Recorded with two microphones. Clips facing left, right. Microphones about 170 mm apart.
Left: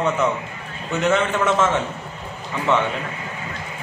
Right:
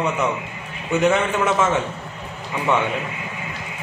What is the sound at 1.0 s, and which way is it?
Speech, 10° right (ahead or behind).